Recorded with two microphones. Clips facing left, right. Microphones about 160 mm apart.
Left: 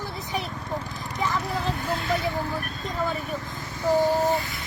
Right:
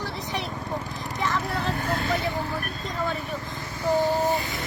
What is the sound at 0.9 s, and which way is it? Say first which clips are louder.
Vehicle: even; centre (ahead or behind).